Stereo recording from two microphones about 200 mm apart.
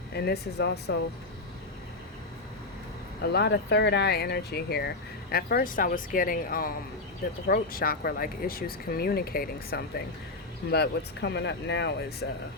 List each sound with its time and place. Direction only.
0.1 s speech: 55° left (ahead or behind)
3.2 s speech: 55° left (ahead or behind)